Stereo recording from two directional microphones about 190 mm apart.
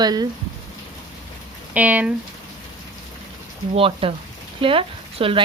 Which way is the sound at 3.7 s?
30° right (ahead or behind).